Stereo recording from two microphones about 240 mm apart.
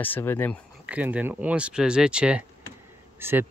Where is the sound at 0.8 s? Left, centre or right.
Centre.